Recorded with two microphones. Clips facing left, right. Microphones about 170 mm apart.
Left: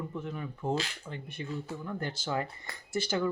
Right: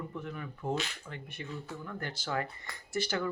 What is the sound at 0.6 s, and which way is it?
Speech, 30° left (ahead or behind).